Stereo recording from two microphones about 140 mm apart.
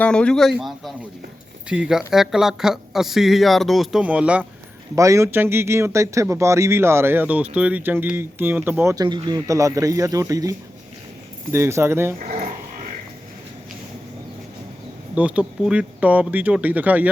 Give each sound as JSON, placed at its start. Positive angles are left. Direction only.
{"t": 0.0, "sound": "a man's voice", "side_deg": 5}
{"t": 4.9, "sound": "a man's voice", "side_deg": -20}
{"t": 9.0, "sound": "speech", "side_deg": -30}
{"t": 11.5, "sound": "speech", "side_deg": -20}
{"t": 15.1, "sound": "a man's voice", "side_deg": -10}